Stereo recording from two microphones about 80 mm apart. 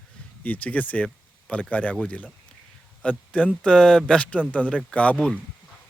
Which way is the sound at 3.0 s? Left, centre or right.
Centre.